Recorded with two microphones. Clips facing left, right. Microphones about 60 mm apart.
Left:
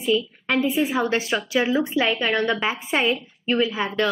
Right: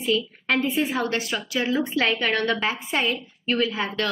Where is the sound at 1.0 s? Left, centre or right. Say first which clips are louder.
Left 4 dB; left.